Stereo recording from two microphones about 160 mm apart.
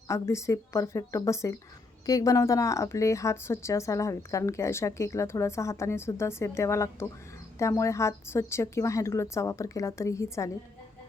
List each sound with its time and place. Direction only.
0.1 s speech: 20° left (ahead or behind)